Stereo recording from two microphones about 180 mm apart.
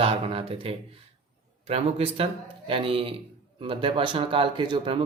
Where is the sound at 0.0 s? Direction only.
30° right (ahead or behind).